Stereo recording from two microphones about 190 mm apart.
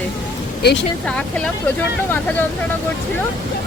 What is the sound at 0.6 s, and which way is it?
Speech, 60° left (ahead or behind).